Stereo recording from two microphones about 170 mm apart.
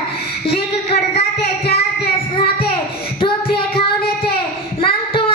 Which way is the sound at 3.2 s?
30° left (ahead or behind).